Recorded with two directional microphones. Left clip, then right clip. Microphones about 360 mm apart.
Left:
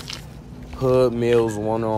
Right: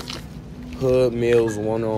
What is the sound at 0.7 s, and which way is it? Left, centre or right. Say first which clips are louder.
Speech: left 1 dB; centre.